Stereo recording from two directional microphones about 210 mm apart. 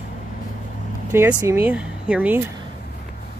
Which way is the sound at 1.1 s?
10° right (ahead or behind).